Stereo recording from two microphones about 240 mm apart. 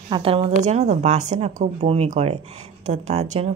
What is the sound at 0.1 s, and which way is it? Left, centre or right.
Speech, right.